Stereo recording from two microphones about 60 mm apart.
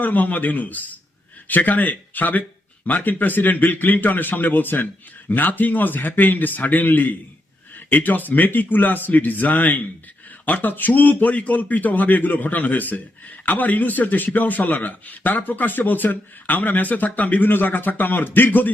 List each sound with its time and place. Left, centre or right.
0.0 s speech: left